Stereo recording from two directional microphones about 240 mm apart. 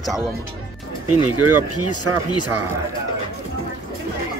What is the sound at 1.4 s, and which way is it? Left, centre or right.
Speech, right.